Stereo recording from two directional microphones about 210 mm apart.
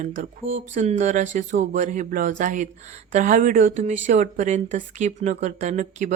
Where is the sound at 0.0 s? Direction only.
35° right (ahead or behind).